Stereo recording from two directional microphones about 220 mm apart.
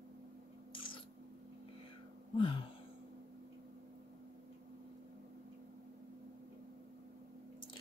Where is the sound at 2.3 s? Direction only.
25° left (ahead or behind).